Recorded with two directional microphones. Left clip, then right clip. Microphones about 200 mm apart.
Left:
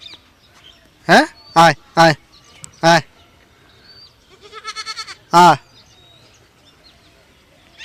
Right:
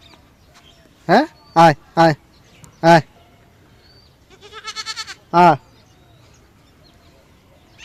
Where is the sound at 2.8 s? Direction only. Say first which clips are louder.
Right 1 dB; 5° right (ahead or behind).